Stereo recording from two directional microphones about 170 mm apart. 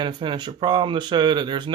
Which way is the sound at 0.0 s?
30° right (ahead or behind).